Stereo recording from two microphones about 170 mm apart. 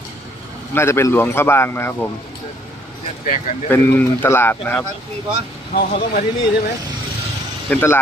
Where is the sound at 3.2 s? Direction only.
50° left (ahead or behind).